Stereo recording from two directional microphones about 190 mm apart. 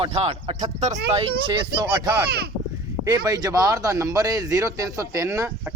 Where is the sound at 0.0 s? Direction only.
30° right (ahead or behind).